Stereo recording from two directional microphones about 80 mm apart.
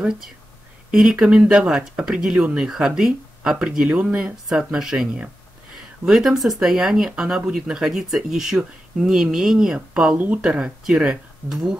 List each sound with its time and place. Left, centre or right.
0.9 s speech: centre
10.1 s speech: right
10.4 s speech: centre